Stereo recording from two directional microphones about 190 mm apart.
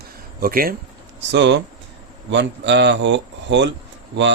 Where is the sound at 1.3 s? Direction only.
70° right (ahead or behind).